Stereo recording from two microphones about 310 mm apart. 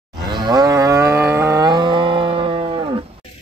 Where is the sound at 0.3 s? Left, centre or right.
Centre.